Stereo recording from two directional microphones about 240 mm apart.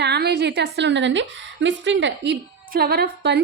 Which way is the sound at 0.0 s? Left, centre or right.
Right.